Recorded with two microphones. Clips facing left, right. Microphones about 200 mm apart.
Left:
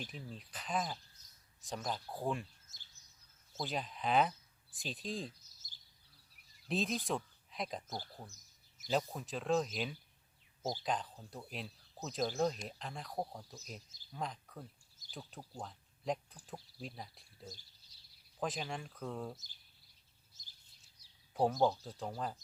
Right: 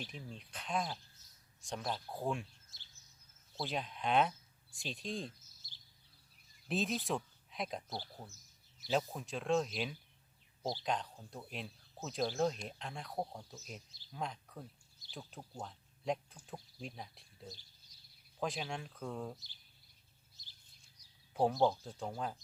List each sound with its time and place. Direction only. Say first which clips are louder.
0.1 s speech: even; centre (ahead or behind)
3.6 s speech: even; centre (ahead or behind)
6.7 s speech: even; centre (ahead or behind)
21.0 s a sound: right 2 dB; 30° left (ahead or behind)
21.3 s speech: even; centre (ahead or behind)